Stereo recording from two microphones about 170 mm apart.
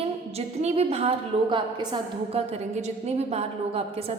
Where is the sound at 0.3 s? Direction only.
40° right (ahead or behind).